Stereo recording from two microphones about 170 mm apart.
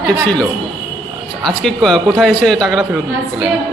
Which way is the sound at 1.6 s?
Centre (ahead or behind).